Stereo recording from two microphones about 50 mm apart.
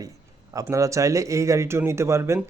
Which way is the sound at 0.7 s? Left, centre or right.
Right.